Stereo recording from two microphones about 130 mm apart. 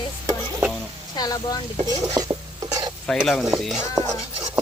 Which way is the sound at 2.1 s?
25° right (ahead or behind).